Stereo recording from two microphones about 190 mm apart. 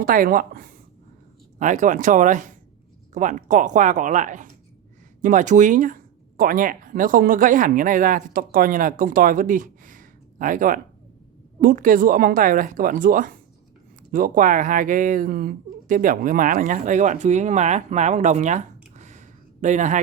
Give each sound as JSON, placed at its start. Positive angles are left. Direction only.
{"t": 0.0, "sound": "speech", "side_deg": -45}